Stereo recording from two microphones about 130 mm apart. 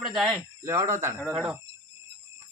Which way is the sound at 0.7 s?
20° right (ahead or behind).